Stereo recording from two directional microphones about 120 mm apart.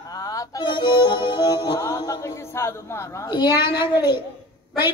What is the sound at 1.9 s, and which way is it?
A man's voice, 35° left (ahead or behind).